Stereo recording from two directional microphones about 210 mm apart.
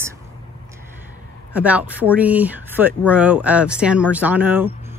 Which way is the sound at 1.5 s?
5° right (ahead or behind).